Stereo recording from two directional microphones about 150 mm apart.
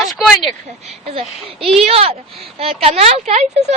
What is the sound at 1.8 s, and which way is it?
Speech, 40° right (ahead or behind).